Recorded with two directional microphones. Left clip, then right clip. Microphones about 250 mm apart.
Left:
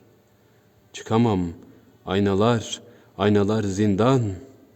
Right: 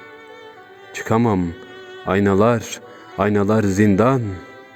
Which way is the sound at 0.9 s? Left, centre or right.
Right.